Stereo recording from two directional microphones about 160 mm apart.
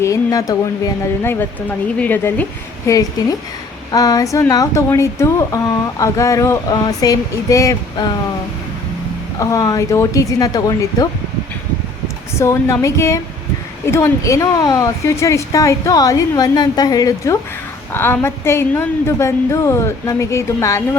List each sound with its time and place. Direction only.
0.0 s a woman's voice: 20° left (ahead or behind)
9.4 s speech: 20° left (ahead or behind)
12.4 s a woman's voice: 20° left (ahead or behind)